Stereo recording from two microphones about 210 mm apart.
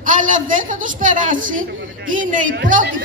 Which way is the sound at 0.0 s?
40° right (ahead or behind).